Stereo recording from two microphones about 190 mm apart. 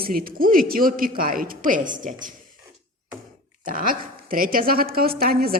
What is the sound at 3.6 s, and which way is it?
A woman's voice, 45° right (ahead or behind).